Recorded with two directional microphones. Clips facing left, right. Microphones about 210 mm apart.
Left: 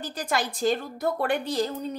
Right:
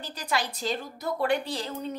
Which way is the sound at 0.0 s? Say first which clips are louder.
Left 3 dB; 50° left (ahead or behind).